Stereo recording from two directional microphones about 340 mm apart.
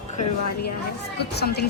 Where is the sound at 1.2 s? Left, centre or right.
Left.